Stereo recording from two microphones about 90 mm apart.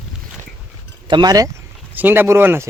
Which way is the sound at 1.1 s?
50° right (ahead or behind).